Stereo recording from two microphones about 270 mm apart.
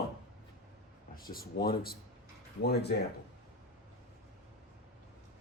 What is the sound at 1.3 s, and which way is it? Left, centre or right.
Speech, left.